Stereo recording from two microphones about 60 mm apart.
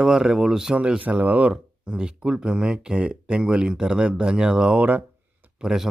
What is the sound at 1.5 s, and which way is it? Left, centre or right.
Speech, centre.